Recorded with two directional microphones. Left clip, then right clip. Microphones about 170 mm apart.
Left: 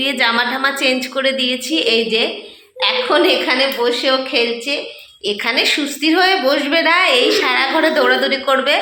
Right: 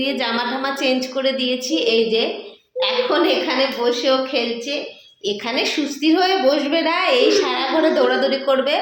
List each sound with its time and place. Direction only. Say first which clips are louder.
0.0 s a woman's voice: left 6 dB; centre (ahead or behind)
2.8 s a woman's voice: left 4 dB; 25° left (ahead or behind)
5.2 s a woman's voice: left 5 dB; centre (ahead or behind)